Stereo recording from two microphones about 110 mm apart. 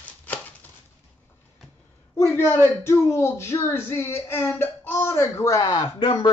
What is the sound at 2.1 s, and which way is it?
A woman's voice, 25° left (ahead or behind).